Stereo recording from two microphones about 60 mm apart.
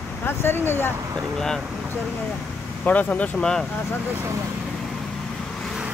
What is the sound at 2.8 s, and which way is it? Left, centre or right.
Speech, left.